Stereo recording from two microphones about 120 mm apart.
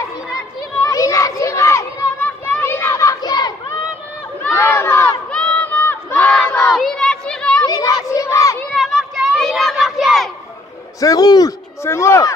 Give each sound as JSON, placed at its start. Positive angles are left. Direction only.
{"t": 0.8, "sound": "children playing", "side_deg": 25}
{"t": 4.4, "sound": "crowd", "side_deg": 20}
{"t": 5.3, "sound": "crowd", "side_deg": 10}
{"t": 7.6, "sound": "a sound", "side_deg": 30}
{"t": 8.7, "sound": "child singing", "side_deg": 0}
{"t": 11.0, "sound": "a sound", "side_deg": 30}